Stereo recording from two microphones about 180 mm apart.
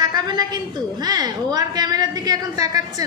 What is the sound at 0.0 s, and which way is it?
A woman's voice, 20° right (ahead or behind).